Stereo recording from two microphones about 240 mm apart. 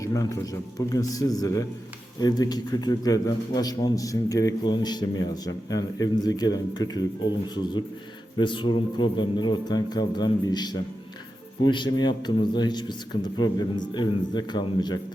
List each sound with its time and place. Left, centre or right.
0.0 s a man's voice: centre